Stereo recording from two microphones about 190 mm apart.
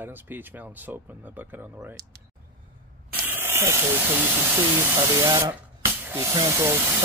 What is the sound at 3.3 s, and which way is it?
Speech, 10° right (ahead or behind).